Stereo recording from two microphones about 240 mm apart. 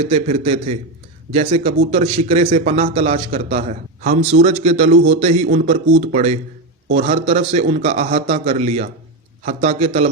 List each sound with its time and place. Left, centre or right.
0.0 s a man's voice: right